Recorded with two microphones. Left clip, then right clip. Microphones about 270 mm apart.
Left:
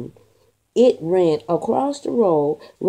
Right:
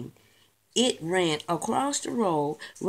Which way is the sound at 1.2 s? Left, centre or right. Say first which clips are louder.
Left 9 dB; right.